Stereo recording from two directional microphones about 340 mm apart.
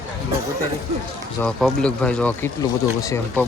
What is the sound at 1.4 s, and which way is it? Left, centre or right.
Speech, centre.